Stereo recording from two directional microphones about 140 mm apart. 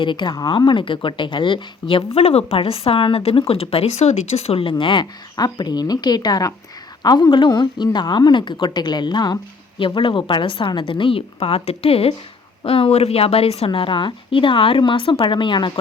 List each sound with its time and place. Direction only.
0.0 s a woman's voice: 35° left (ahead or behind)